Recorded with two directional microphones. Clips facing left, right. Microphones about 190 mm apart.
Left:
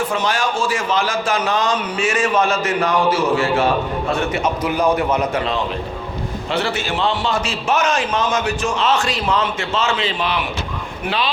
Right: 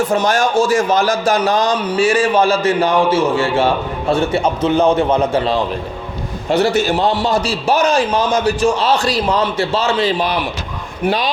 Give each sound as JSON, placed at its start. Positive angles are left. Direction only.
{"t": 0.1, "sound": "a man's voice", "side_deg": -45}
{"t": 6.5, "sound": "a man's voice", "side_deg": -40}